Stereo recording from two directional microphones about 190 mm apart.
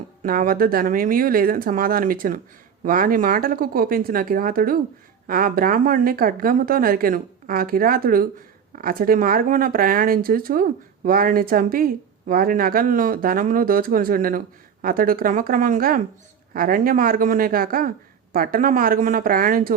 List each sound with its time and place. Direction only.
0.2 s speech: 45° right (ahead or behind)